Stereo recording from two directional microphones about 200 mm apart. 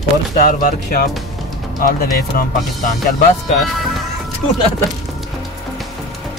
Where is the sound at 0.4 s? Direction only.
45° left (ahead or behind).